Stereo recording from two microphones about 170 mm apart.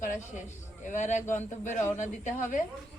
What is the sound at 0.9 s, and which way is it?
Speech, 45° left (ahead or behind).